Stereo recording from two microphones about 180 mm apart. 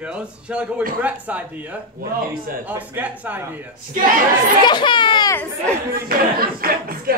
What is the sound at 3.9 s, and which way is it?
Speech, 50° right (ahead or behind).